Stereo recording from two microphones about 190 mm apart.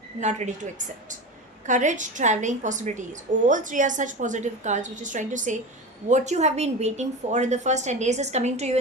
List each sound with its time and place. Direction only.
0.2 s a woman's voice: 40° right (ahead or behind)